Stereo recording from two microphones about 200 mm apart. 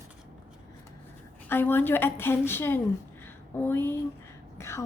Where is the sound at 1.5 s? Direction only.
10° left (ahead or behind).